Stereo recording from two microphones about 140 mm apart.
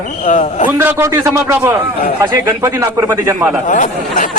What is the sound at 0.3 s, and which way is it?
Speech, 60° left (ahead or behind).